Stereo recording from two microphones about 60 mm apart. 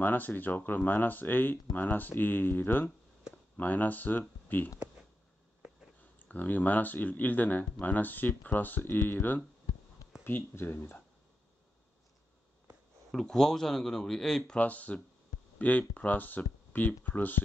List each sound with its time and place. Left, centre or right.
0.0 s speech: left
6.1 s speech: left
13.1 s a man's voice: centre
14.6 s speech: left